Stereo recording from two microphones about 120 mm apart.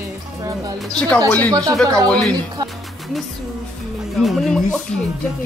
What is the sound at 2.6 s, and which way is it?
Speech, 35° right (ahead or behind).